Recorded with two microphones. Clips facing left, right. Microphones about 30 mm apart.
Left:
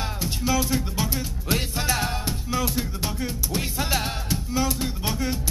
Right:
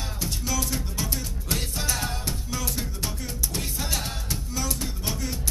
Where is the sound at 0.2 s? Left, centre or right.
Centre.